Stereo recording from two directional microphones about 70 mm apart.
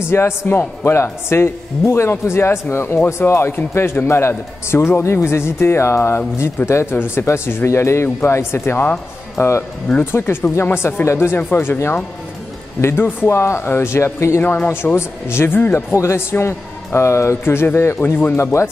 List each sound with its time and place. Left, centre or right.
0.1 s speech: left
18.4 s speech: left